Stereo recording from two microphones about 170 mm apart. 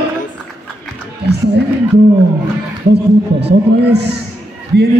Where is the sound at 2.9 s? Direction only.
80° right.